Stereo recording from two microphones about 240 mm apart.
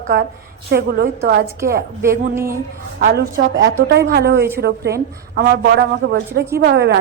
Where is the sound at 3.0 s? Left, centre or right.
Right.